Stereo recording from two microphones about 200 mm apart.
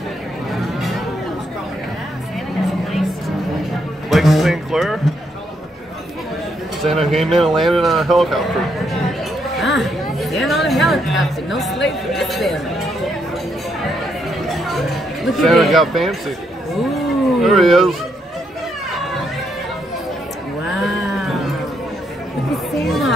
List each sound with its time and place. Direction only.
0.5 s music: centre (ahead or behind)
4.1 s music: centre (ahead or behind)
6.8 s speech: centre (ahead or behind)
9.6 s chatter: centre (ahead or behind)
10.7 s speech: centre (ahead or behind)
14.5 s music: centre (ahead or behind)
15.3 s speech: centre (ahead or behind)
20.7 s moo: centre (ahead or behind)
22.8 s music: centre (ahead or behind)